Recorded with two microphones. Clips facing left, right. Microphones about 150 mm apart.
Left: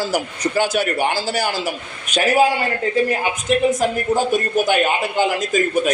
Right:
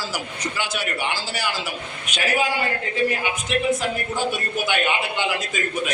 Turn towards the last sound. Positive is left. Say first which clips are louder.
# left 9 dB
turn(degrees=40)  # may be behind; listen again after turning